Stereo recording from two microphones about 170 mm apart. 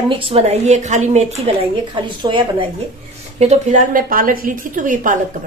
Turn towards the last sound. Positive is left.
turn(degrees=-50)  # may be behind; listen again after turning